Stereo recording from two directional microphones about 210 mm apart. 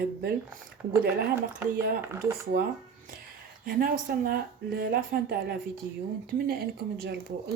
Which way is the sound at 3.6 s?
45° right (ahead or behind).